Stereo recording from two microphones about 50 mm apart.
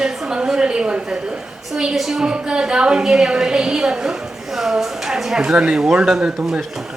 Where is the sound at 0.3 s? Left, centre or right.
Centre.